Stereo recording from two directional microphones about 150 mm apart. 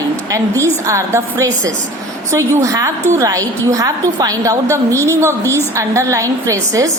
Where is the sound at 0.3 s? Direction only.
20° right (ahead or behind).